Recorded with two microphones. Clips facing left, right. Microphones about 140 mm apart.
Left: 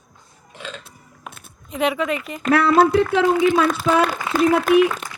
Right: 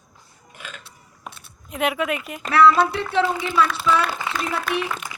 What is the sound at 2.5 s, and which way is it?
A woman's voice, 45° left (ahead or behind).